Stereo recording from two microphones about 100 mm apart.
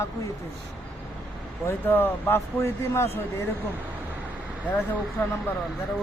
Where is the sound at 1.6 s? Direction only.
25° left (ahead or behind).